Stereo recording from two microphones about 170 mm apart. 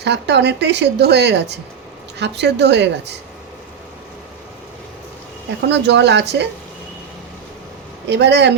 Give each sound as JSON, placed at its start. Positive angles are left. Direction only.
{"t": 0.0, "sound": "a woman's voice", "side_deg": -85}
{"t": 5.6, "sound": "a woman's voice", "side_deg": -90}
{"t": 8.0, "sound": "a woman's voice", "side_deg": -80}